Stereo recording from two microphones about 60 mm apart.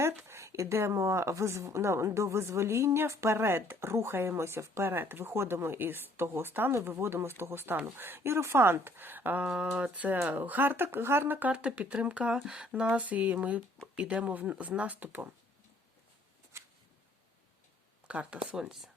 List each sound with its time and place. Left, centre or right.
0.0 s a woman's voice: right
4.9 s a woman's voice: right
9.7 s speech: right
11.5 s speech: right
16.5 s a sound: right
18.1 s speech: right
18.5 s speech: centre